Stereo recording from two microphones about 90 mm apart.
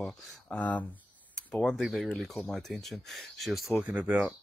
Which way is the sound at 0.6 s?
15° left (ahead or behind).